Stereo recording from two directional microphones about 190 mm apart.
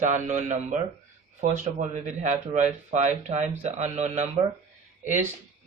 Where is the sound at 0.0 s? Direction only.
40° right (ahead or behind).